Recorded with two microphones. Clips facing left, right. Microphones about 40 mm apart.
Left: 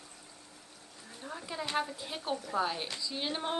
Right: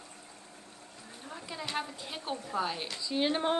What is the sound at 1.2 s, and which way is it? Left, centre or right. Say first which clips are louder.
A woman's voice: left 2 dB; centre.